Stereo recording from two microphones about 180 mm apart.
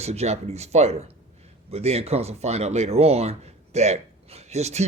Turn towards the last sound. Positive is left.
turn(degrees=-35)  # may be behind; listen again after turning